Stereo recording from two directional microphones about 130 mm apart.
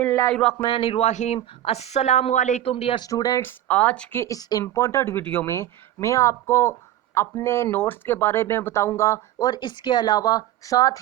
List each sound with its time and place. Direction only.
0.1 s a sound: 20° left (ahead or behind)
0.6 s a woman's voice: 45° left (ahead or behind); by 2.6 s 65° left (ahead or behind)
2.6 s speech: 50° left (ahead or behind)
3.0 s speech: 30° left (ahead or behind)
3.4 s speech: 10° left (ahead or behind)
4.2 s speech: 30° left (ahead or behind)